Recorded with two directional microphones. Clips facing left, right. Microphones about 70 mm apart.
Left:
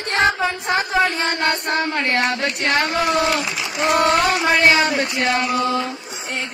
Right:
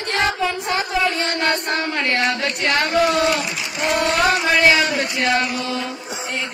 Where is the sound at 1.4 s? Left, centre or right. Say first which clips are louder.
Left 1 dB; left.